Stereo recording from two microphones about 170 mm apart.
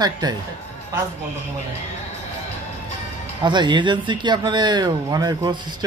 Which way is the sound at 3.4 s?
25° right (ahead or behind).